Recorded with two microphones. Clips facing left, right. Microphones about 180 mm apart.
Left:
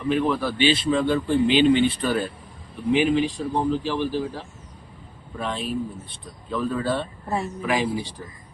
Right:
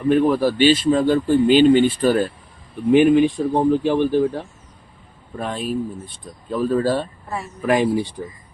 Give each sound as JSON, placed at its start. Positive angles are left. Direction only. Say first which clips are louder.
{"t": 0.1, "sound": "speech", "louder": "right 6 dB", "side_deg": -45}